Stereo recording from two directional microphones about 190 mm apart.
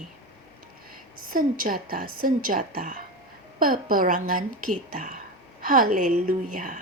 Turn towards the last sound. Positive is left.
turn(degrees=-45)  # may be behind; listen again after turning